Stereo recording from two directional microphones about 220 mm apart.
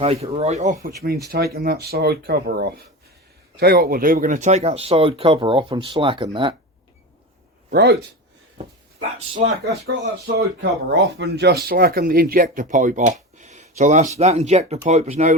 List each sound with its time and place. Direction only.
0.0 s speech: 25° right (ahead or behind)
1.3 s speech: 45° right (ahead or behind); by 6.6 s 20° right (ahead or behind)
7.7 s speech: 45° right (ahead or behind)
8.5 s dog: 30° right (ahead or behind)
10.3 s speech: 55° right (ahead or behind); by 15.4 s 30° right (ahead or behind)